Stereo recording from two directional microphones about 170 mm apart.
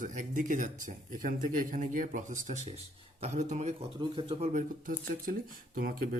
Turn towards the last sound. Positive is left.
turn(degrees=-60)  # may be behind; listen again after turning